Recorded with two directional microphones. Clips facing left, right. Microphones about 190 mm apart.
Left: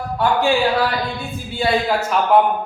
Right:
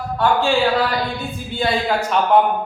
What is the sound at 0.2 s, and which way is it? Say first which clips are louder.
Speech: even; 15° left (ahead or behind).